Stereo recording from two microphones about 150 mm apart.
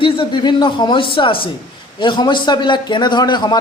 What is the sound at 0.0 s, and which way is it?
A man's voice, 30° left (ahead or behind).